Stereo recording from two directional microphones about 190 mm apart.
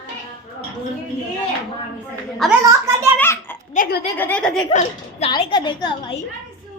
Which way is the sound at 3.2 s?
10° left (ahead or behind).